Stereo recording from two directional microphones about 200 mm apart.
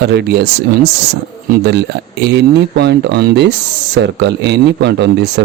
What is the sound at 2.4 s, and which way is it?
Speech, 55° right (ahead or behind).